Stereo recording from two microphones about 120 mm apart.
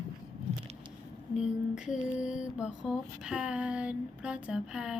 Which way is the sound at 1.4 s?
5° right (ahead or behind).